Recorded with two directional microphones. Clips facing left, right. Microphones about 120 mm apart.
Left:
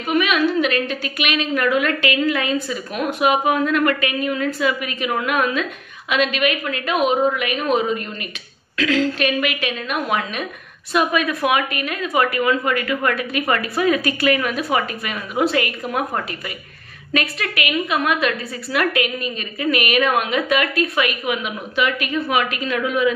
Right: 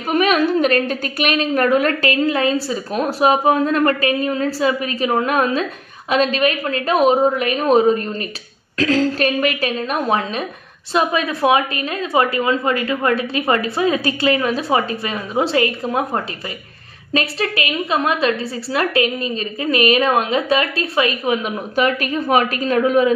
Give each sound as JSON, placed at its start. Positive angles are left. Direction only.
{"t": 0.1, "sound": "a woman's voice", "side_deg": -40}